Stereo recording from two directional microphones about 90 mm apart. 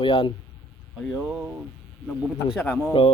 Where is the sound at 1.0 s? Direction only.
5° right (ahead or behind).